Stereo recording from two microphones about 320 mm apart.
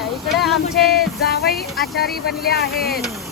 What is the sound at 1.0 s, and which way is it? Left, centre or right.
Speech, left.